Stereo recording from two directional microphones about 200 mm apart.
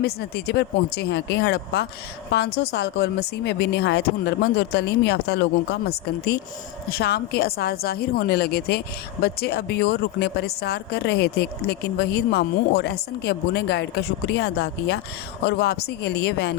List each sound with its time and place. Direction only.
0.0 s a woman's voice: 55° left (ahead or behind)